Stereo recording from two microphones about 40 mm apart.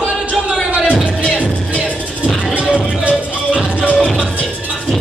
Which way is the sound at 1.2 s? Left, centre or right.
Left.